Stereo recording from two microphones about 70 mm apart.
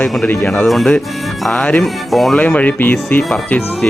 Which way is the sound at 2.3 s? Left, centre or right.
Left.